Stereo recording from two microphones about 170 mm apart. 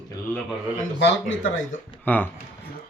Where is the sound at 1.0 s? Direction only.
90° left.